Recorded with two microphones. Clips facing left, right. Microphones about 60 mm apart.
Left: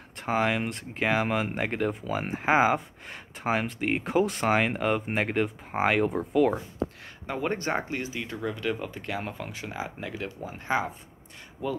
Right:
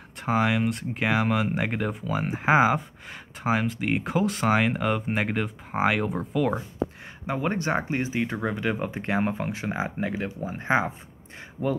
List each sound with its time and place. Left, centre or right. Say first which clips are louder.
0.2 s speech: right 2 dB; centre
7.2 s speech: right 2 dB; centre
7.9 s speech: right 6 dB; right